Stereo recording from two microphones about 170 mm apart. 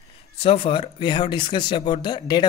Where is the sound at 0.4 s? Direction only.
35° left (ahead or behind).